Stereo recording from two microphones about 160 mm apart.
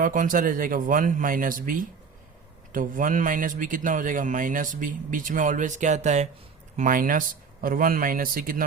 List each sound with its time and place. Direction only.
0.0 s speech: 55° right (ahead or behind)
6.7 s speech: 60° right (ahead or behind)